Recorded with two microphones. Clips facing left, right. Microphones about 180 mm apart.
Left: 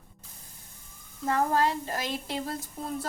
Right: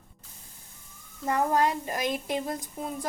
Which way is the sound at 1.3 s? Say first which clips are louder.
Right 1 dB; 15° right (ahead or behind).